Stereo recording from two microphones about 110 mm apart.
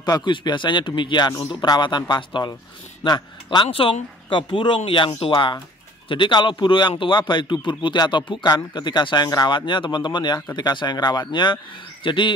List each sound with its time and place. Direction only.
0.0 s a man's voice: 40° left (ahead or behind)